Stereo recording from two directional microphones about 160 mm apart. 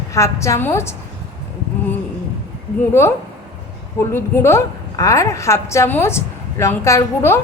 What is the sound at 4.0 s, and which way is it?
A woman's voice, 15° left (ahead or behind).